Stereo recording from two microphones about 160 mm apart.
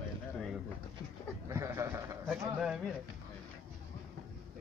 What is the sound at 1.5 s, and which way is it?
Sheep, 15° right (ahead or behind).